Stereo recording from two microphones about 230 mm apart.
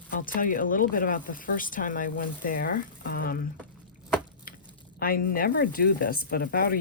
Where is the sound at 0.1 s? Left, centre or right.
Left.